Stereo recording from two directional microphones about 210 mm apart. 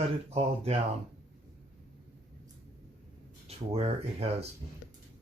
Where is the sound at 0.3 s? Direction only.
30° right (ahead or behind).